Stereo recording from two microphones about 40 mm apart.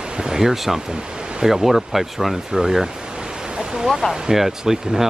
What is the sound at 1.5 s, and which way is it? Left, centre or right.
Speech, centre.